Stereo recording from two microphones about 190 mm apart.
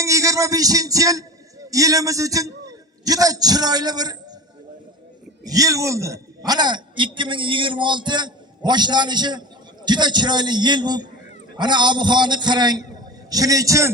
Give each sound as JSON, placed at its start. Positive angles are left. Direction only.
{"t": 0.0, "sound": "a man's voice", "side_deg": -15}
{"t": 5.5, "sound": "a man's voice", "side_deg": -20}